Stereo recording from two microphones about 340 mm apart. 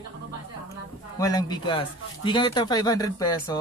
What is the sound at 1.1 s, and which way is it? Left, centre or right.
A man's voice, centre.